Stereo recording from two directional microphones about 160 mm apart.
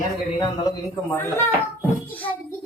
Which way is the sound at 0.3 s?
25° left (ahead or behind).